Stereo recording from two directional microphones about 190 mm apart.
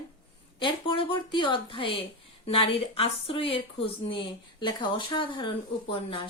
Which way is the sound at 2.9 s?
30° left (ahead or behind).